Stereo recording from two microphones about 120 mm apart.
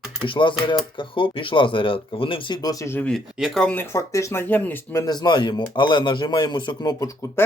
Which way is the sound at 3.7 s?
25° left (ahead or behind).